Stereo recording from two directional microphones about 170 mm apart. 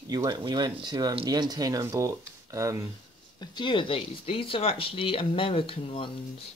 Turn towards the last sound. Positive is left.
turn(degrees=30)  # may be behind; listen again after turning